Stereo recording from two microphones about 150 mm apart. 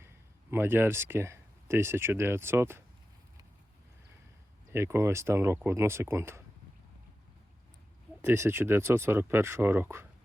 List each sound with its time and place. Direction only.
0.5 s speech: 15° right (ahead or behind)
4.7 s speech: 15° right (ahead or behind)
8.2 s speech: 15° right (ahead or behind)